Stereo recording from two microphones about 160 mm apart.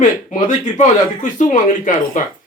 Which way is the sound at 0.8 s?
50° left (ahead or behind).